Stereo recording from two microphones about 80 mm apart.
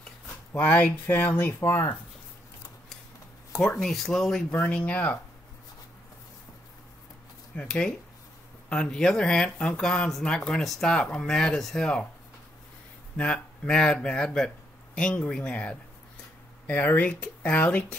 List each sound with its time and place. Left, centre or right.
0.5 s speech: left
3.5 s speech: centre
4.5 s speech: centre
7.5 s speech: centre
13.1 s speech: centre